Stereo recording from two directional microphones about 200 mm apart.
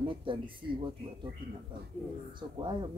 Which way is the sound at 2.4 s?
20° right (ahead or behind).